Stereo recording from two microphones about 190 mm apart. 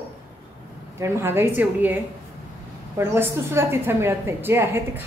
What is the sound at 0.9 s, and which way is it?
Speech, 15° right (ahead or behind).